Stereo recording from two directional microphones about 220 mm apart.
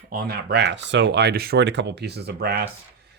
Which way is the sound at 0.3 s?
50° right (ahead or behind).